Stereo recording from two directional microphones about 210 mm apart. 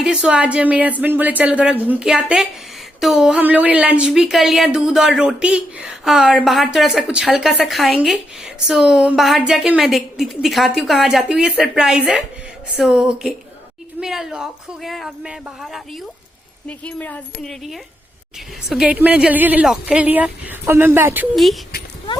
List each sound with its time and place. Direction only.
0.0 s a woman's voice: 5° right (ahead or behind)